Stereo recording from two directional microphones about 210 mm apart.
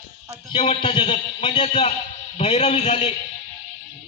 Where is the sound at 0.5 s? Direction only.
25° left (ahead or behind).